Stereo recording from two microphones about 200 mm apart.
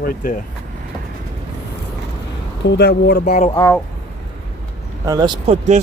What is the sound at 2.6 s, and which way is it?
Speech, 55° left (ahead or behind).